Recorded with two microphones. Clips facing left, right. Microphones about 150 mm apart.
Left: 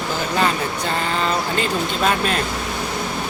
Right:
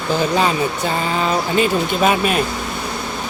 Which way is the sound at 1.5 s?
10° right (ahead or behind).